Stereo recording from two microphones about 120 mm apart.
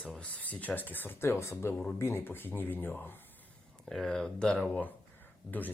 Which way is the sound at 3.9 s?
5° left (ahead or behind).